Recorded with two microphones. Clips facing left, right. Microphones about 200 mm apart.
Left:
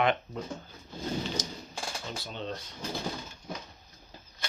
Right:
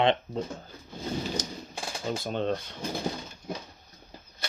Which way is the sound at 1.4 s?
55° right (ahead or behind).